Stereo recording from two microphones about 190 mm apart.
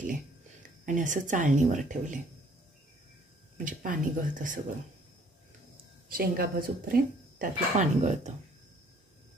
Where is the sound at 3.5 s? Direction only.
45° right (ahead or behind).